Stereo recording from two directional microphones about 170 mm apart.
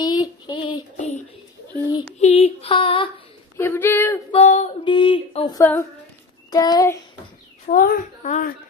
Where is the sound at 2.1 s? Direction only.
40° left (ahead or behind).